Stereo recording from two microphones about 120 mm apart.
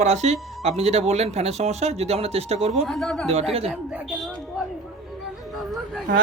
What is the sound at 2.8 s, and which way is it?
Speech, 5° left (ahead or behind).